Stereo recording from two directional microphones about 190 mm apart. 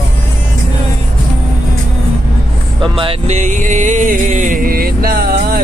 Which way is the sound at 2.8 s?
30° right (ahead or behind).